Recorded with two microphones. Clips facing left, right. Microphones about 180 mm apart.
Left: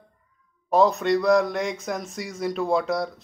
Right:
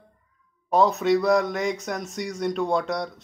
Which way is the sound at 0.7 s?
Centre (ahead or behind).